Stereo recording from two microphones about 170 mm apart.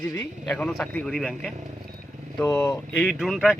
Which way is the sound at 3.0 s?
Centre (ahead or behind).